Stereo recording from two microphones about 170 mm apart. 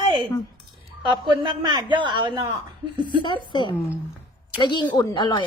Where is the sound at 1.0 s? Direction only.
25° right (ahead or behind).